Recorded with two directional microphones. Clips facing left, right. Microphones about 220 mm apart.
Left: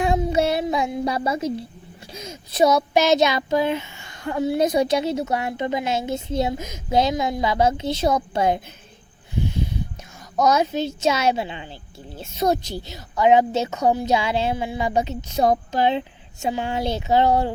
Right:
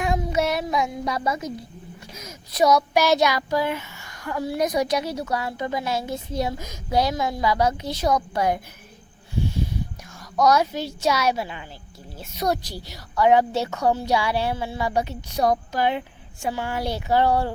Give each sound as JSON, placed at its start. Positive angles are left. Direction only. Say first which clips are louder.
{"t": 0.0, "sound": "child singing", "louder": "left 3 dB", "side_deg": 30}
{"t": 2.1, "sound": "speech", "louder": "left 3 dB", "side_deg": 30}
{"t": 10.3, "sound": "speech", "louder": "left 1 dB", "side_deg": 20}